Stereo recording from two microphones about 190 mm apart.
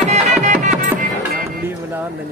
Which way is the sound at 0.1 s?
40° right (ahead or behind).